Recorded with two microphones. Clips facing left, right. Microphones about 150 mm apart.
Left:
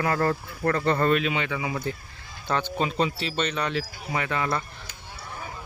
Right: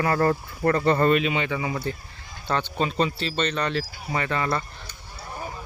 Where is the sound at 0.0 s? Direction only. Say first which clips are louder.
Right 2 dB; 5° right (ahead or behind).